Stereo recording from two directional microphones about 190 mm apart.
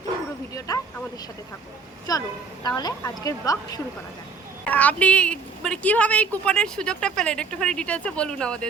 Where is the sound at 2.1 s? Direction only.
20° left (ahead or behind).